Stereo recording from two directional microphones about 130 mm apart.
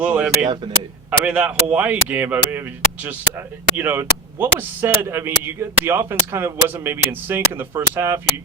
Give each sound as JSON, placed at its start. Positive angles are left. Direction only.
{"t": 0.0, "sound": "speech", "side_deg": -10}
{"t": 0.4, "sound": "speech", "side_deg": -35}
{"t": 1.2, "sound": "speech", "side_deg": -10}